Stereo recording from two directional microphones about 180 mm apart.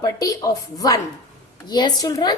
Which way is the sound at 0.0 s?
20° left (ahead or behind).